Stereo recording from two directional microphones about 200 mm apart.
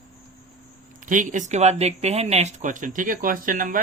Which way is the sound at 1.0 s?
40° right (ahead or behind).